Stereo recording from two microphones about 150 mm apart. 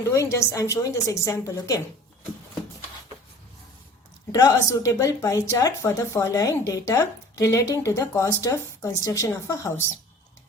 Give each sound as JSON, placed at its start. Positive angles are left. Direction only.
{"t": 0.1, "sound": "a woman's voice", "side_deg": 20}
{"t": 4.3, "sound": "a woman's voice", "side_deg": 25}